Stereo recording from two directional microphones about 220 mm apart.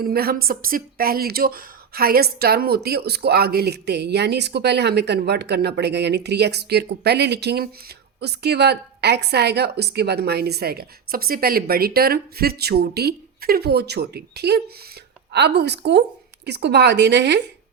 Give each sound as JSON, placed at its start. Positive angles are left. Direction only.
{"t": 0.0, "sound": "a woman's voice", "side_deg": -45}